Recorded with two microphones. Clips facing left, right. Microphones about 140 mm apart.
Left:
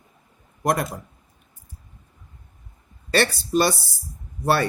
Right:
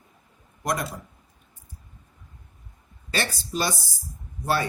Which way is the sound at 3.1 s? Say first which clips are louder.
Left 8 dB; 60° left (ahead or behind).